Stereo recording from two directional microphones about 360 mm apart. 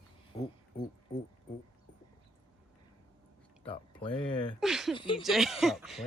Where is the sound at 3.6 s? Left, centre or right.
Centre.